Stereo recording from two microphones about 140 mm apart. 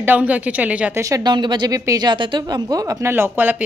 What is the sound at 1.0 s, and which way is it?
Speech, 25° right (ahead or behind).